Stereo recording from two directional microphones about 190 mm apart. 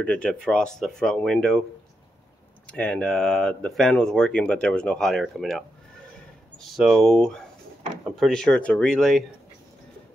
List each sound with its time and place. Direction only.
0.0 s speech: 5° left (ahead or behind)
2.6 s speech: 5° left (ahead or behind)